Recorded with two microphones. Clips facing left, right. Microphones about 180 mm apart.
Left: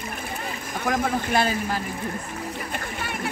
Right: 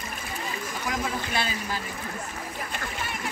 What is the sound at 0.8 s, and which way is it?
Speech, 55° left (ahead or behind).